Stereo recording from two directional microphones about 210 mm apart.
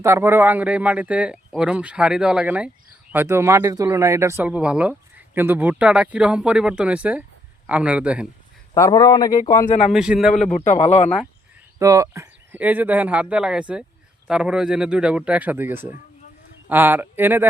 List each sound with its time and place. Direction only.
0.0 s speech: 10° right (ahead or behind)
8.7 s speech: 15° left (ahead or behind)
9.6 s a man's voice: 30° left (ahead or behind)
9.9 s speech: 5° right (ahead or behind)
10.5 s a man's voice: 35° left (ahead or behind)
11.8 s speech: 15° right (ahead or behind)